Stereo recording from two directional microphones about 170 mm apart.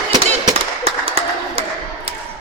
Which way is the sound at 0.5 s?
35° right (ahead or behind).